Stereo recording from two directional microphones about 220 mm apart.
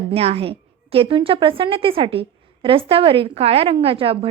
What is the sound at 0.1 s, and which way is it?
A woman's voice, 25° right (ahead or behind).